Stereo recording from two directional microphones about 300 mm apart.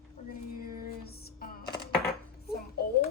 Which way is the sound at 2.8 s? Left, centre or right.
Left.